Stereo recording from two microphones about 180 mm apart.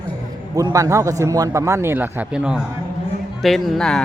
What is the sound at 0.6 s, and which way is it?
Speech, 20° right (ahead or behind).